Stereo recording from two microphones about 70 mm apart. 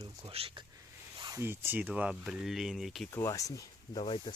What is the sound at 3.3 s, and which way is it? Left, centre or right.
Speech, left.